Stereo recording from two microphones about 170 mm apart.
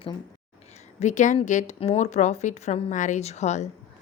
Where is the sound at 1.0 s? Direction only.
45° left (ahead or behind).